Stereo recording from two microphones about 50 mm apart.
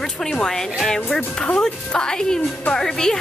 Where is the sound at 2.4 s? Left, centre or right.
Left.